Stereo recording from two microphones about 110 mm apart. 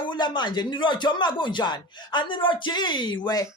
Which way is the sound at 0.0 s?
45° left (ahead or behind).